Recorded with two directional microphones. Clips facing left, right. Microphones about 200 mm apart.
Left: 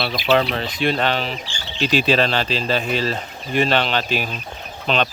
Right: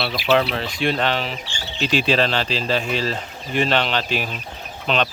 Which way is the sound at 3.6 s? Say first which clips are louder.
Left 1 dB; 40° left (ahead or behind).